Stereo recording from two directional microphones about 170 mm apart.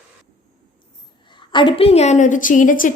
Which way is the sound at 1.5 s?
30° left (ahead or behind).